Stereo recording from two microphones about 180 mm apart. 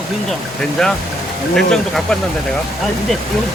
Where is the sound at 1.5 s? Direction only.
Centre (ahead or behind).